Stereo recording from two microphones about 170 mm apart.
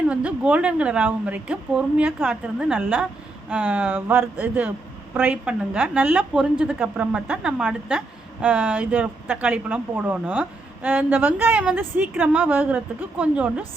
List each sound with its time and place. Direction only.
0.1 s a woman's voice: 5° right (ahead or behind)